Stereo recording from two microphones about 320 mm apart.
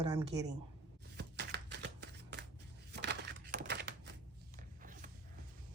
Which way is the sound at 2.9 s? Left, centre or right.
Right.